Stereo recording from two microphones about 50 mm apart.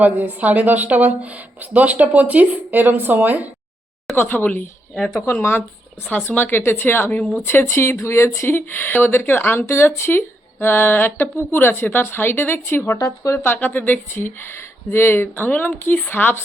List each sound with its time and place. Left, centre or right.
0.0 s speech: right
4.1 s speech: left
4.9 s speech: centre
5.2 s speech: left
8.4 s speech: left
9.7 s speech: left
13.5 s a woman's voice: left
14.1 s speech: left